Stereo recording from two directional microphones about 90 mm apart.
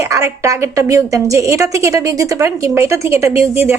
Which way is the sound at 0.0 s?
35° right (ahead or behind).